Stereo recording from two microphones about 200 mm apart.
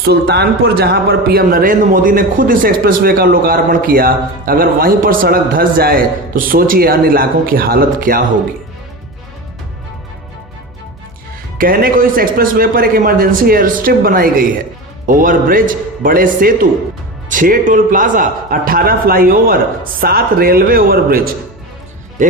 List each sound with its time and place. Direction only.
0.0 s a man's voice: 50° right (ahead or behind)
11.5 s a man's voice: 45° right (ahead or behind)